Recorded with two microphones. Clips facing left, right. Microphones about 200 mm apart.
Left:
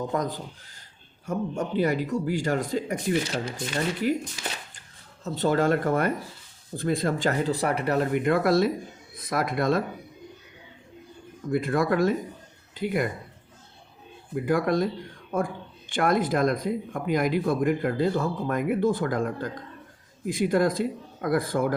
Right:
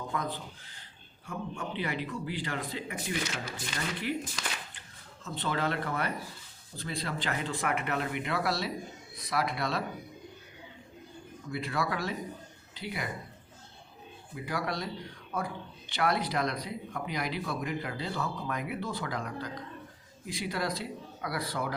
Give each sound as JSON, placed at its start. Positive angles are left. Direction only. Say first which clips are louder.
{"t": 0.1, "sound": "speech", "louder": "left 7 dB", "side_deg": 40}
{"t": 5.2, "sound": "speech", "louder": "left 9 dB", "side_deg": 40}
{"t": 11.4, "sound": "speech", "louder": "left 9 dB", "side_deg": 50}
{"t": 14.3, "sound": "speech", "louder": "left 11 dB", "side_deg": 50}